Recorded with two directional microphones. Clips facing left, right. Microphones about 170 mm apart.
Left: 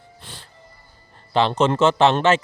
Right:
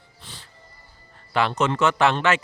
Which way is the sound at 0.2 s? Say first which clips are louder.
Left 2 dB; 55° left (ahead or behind).